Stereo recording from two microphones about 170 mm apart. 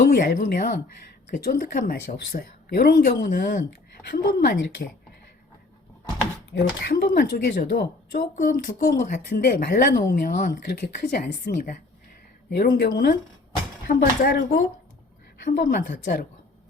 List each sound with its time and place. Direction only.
0.1 s speech: 70° left (ahead or behind)
3.2 s speech: 55° left (ahead or behind)
6.5 s speech: 75° left (ahead or behind); by 16.2 s 55° left (ahead or behind)